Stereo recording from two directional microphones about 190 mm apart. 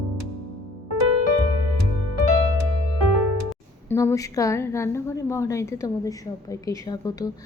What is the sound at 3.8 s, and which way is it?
A woman's voice, 15° left (ahead or behind).